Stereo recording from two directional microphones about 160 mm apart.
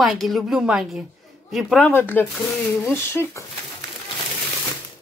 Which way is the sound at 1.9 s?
10° left (ahead or behind).